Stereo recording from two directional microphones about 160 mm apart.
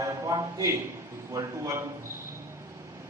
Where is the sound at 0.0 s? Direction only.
20° right (ahead or behind).